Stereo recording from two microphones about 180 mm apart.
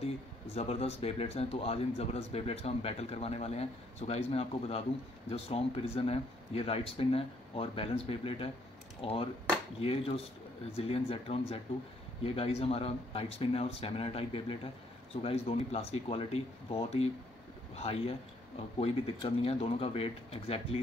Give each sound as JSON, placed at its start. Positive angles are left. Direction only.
{"t": 0.6, "sound": "speech", "side_deg": 35}